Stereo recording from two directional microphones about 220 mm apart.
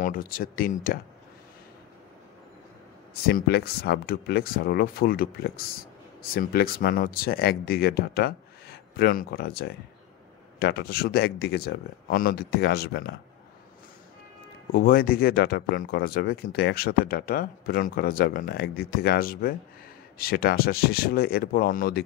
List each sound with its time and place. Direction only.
0.0 s speech: 40° left (ahead or behind)
3.3 s speech: 45° left (ahead or behind)
14.7 s speech: 40° left (ahead or behind)